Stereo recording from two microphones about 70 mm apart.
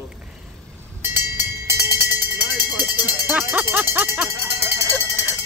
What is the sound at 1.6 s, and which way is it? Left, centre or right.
Music, right.